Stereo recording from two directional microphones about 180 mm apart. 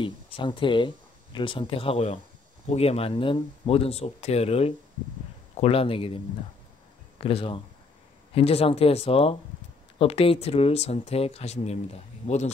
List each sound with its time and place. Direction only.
0.0 s speech: 25° left (ahead or behind)